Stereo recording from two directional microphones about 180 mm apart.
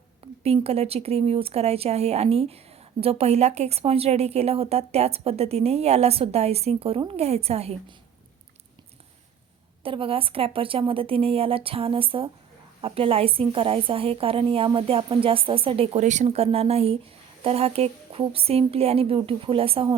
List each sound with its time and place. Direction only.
0.4 s a woman's voice: 35° right (ahead or behind)
9.8 s a woman's voice: 30° right (ahead or behind)